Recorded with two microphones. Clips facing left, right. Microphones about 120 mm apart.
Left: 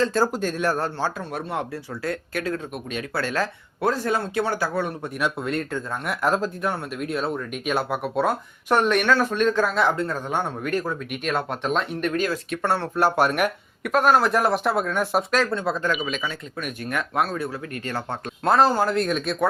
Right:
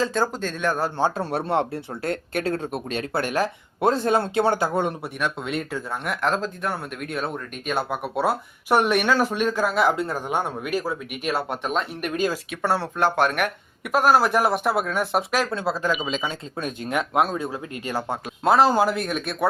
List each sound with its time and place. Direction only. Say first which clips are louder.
0.1 s speech: left 2 dB; 5° left (ahead or behind)
0.9 s speech: right 4 dB; 20° right (ahead or behind)
1.2 s speech: right 5 dB; 30° right (ahead or behind)
3.2 s speech: right 2 dB; 15° right (ahead or behind)
5.2 s speech: left 1 dB; centre (ahead or behind)
12.5 s speech: even; 5° right (ahead or behind)
16.0 s speech: right 1 dB; 20° right (ahead or behind); by 19.5 s centre (ahead or behind)